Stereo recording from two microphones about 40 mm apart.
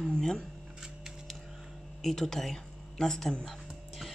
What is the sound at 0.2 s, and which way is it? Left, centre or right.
Speech, centre.